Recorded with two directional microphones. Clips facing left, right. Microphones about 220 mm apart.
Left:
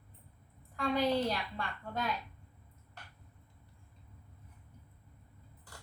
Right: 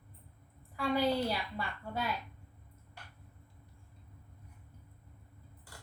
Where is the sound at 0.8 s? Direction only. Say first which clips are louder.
Even; 5° right (ahead or behind).